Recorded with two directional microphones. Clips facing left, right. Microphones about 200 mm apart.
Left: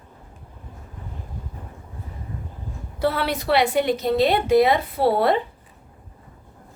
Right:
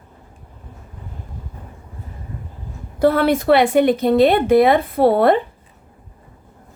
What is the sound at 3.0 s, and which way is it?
A woman's voice, 50° right (ahead or behind).